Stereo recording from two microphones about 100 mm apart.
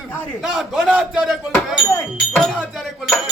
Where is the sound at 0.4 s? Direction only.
5° right (ahead or behind).